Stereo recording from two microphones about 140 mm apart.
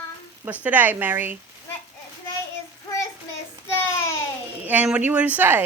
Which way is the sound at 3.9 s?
20° left (ahead or behind).